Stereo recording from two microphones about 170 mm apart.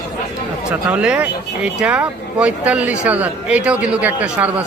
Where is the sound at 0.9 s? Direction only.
10° right (ahead or behind).